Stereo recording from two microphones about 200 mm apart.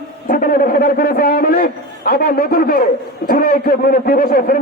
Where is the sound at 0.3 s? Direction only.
40° left (ahead or behind).